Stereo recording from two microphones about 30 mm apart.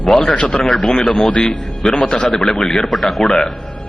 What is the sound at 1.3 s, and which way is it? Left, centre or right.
Speech, left.